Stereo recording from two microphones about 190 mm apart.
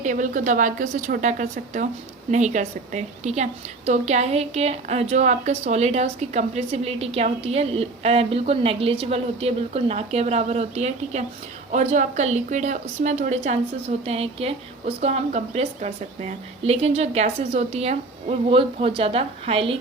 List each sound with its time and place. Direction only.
0.0 s a woman's voice: 40° right (ahead or behind)